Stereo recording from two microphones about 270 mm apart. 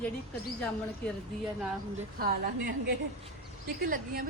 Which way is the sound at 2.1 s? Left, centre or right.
Right.